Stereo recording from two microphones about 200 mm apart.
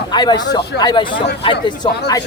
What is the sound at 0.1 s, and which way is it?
Speech, 20° left (ahead or behind).